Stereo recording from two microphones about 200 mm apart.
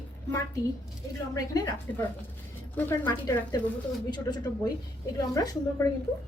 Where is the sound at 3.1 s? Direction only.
20° left (ahead or behind).